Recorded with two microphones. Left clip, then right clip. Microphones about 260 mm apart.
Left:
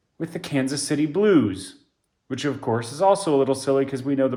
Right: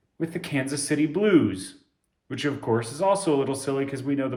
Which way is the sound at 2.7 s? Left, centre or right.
Centre.